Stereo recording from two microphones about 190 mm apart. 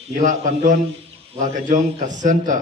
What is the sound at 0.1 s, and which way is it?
A man's voice, 40° right (ahead or behind).